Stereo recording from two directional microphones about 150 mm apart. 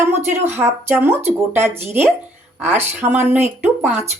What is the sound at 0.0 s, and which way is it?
Speech, 15° right (ahead or behind).